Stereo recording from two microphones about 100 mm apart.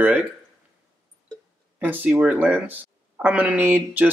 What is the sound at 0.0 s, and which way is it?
Speech, 15° right (ahead or behind).